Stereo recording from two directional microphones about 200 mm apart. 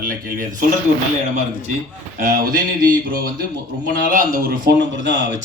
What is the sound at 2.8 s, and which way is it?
A man's voice, 45° right (ahead or behind).